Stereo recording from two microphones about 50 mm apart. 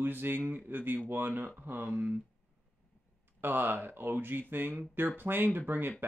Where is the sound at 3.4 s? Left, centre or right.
Right.